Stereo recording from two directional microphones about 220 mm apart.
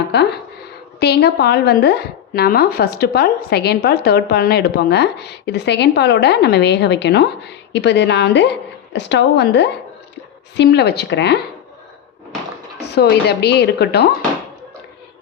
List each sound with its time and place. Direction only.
0.1 s a woman's voice: 50° left (ahead or behind)
13.0 s a woman's voice: 50° left (ahead or behind)